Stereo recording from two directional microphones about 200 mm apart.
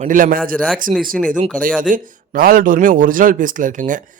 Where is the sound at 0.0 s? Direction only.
40° right (ahead or behind).